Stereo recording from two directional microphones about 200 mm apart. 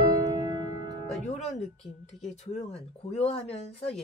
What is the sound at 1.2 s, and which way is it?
Music, 35° left (ahead or behind).